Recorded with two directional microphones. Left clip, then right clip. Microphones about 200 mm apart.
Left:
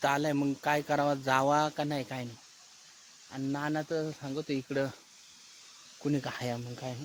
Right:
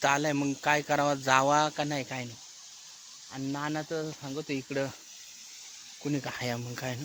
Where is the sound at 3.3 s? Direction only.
25° left (ahead or behind).